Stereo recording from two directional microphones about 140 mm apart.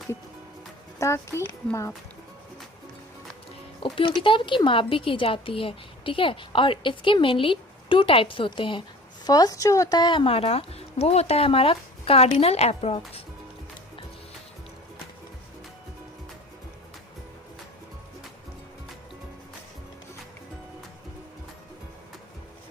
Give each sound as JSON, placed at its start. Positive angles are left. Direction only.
{"t": 0.9, "sound": "speech", "side_deg": 20}
{"t": 3.8, "sound": "speech", "side_deg": 40}